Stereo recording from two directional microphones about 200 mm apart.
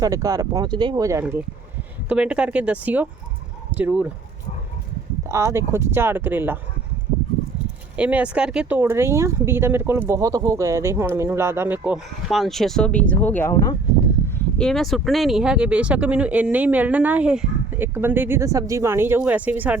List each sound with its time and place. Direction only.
0.0 s speech: 15° right (ahead or behind)
2.0 s speech: 5° right (ahead or behind)
5.3 s speech: 15° right (ahead or behind)
7.9 s speech: 5° right (ahead or behind); by 13.7 s 15° left (ahead or behind)
14.3 s speech: 5° left (ahead or behind)